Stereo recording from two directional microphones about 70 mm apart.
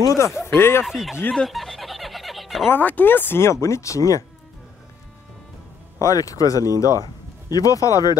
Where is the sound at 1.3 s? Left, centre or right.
Centre.